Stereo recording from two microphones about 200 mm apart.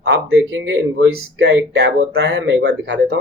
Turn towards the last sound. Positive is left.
turn(degrees=-60)  # may be behind; listen again after turning